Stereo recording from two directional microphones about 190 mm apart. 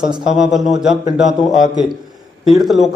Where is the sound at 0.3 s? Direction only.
5° right (ahead or behind).